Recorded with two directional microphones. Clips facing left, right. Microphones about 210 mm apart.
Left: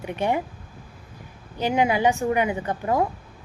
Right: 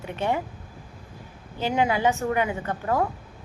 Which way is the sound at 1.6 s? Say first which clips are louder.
Left 2 dB; 15° left (ahead or behind).